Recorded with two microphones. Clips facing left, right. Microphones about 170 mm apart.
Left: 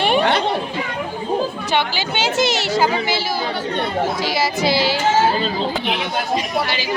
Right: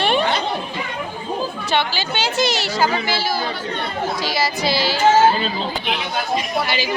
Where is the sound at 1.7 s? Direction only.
20° left (ahead or behind).